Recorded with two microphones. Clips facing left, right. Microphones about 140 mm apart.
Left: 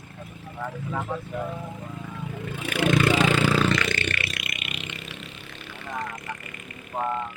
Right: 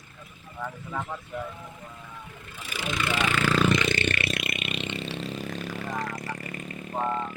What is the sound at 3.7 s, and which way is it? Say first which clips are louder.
Vehicle: right 1 dB; 20° right (ahead or behind).